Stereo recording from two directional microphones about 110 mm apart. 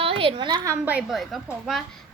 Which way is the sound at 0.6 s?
20° right (ahead or behind).